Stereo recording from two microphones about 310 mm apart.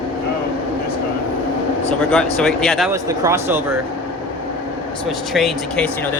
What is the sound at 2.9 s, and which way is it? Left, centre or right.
Speech, centre.